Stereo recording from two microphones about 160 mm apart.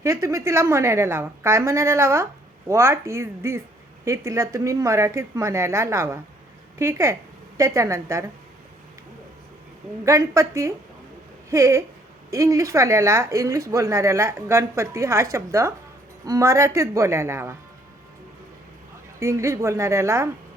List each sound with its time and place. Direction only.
0.0 s a woman's voice: 20° right (ahead or behind)
10.1 s a woman's voice: 20° right (ahead or behind)
19.2 s a woman's voice: 20° right (ahead or behind)